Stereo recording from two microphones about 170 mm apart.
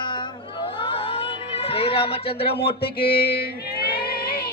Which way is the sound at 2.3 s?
70° left (ahead or behind).